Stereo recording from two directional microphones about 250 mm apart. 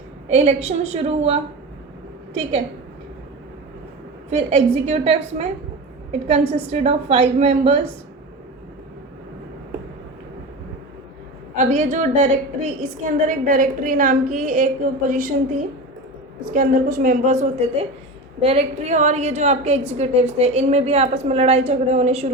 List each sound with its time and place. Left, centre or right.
0.3 s a woman's voice: right
4.3 s a woman's voice: right
11.5 s a woman's voice: right
16.5 s a woman's voice: right